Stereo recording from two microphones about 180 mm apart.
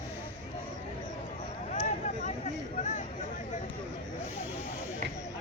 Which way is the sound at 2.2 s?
35° left (ahead or behind).